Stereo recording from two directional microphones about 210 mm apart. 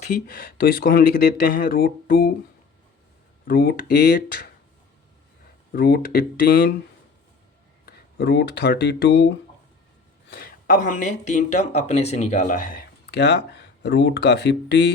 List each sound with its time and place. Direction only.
0.0 s speech: 40° left (ahead or behind)
3.4 s speech: 45° left (ahead or behind)
5.7 s speech: 45° left (ahead or behind)
7.9 s speech: 50° left (ahead or behind)
10.2 s speech: 45° left (ahead or behind)